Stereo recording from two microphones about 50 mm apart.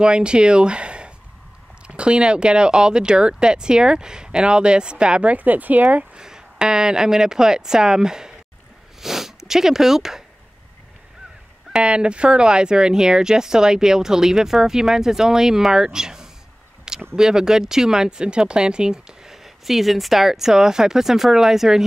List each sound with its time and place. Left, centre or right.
0.0 s speech: centre
6.1 s speech: centre
11.7 s speech: centre